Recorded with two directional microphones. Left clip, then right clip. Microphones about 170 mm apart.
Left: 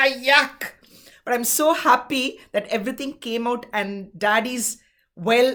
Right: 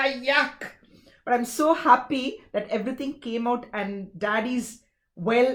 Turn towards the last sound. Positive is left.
turn(degrees=25)  # may be behind; listen again after turning